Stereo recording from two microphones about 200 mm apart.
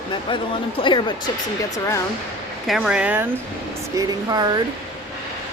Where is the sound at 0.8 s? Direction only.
25° left (ahead or behind).